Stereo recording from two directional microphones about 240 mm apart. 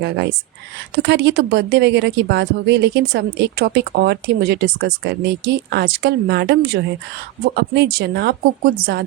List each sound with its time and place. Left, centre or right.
0.9 s speech: right